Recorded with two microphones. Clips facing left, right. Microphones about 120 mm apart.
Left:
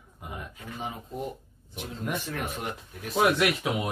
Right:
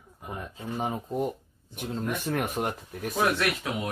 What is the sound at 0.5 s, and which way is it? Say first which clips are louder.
Speech: right 6 dB; 25° right (ahead or behind).